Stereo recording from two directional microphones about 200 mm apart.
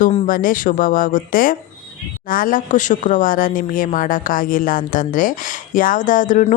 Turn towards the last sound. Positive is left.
turn(degrees=40)  # may be behind; listen again after turning